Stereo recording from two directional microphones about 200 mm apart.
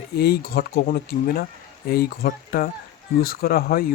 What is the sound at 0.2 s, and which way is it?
Speech, 50° left (ahead or behind).